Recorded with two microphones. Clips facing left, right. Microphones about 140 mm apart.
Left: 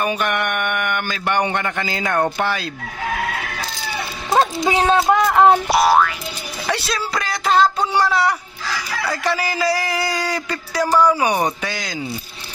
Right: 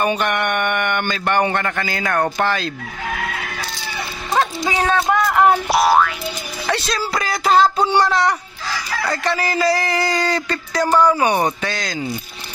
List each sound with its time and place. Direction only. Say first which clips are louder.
0.0 s speech: right 2 dB; centre (ahead or behind); by 2.2 s 20° left (ahead or behind)
2.2 s a man's voice: right 1 dB; 10° left (ahead or behind)
4.3 s speech: left 3 dB; 25° left (ahead or behind)
5.3 s a sound: left 2 dB; 20° left (ahead or behind)
5.7 s a man's voice: even; centre (ahead or behind)